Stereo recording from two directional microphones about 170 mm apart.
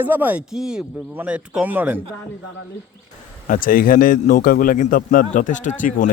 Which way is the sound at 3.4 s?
55° left (ahead or behind).